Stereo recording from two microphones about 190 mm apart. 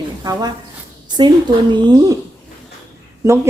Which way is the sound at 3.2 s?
15° right (ahead or behind).